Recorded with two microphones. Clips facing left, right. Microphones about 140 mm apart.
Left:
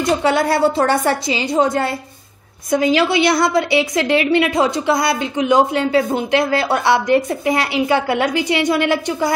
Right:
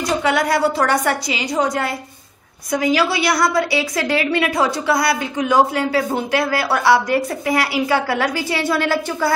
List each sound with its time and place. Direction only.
0.0 s a woman's voice: 30° left (ahead or behind)